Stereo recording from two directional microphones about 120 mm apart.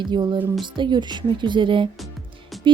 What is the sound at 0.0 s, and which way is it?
Speech, 40° right (ahead or behind).